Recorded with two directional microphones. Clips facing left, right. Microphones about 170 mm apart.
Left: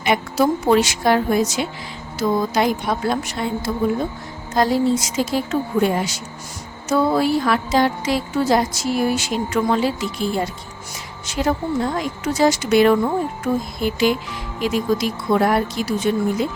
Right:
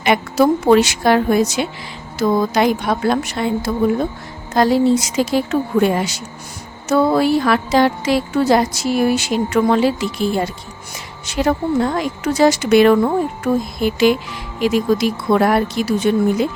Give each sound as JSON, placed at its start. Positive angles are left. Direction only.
{"t": 0.0, "sound": "music", "side_deg": -70}